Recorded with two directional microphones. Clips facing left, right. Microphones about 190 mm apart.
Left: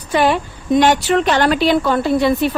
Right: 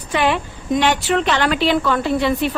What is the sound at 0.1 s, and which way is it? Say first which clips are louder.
A woman's voice: left 3 dB; 40° left (ahead or behind).